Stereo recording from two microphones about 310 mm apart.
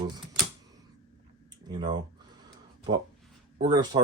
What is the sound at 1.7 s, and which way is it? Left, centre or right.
Speech, centre.